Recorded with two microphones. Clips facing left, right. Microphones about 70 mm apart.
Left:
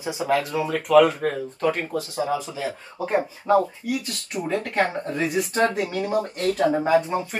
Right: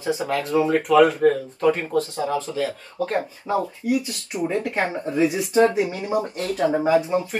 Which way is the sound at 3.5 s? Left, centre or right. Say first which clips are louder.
Left 6 dB; centre.